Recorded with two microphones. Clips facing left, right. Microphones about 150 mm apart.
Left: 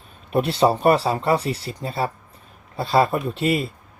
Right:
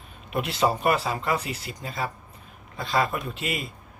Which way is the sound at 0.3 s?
30° left (ahead or behind).